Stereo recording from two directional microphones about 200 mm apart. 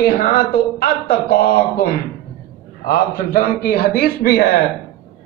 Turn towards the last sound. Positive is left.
turn(degrees=50)  # may be behind; listen again after turning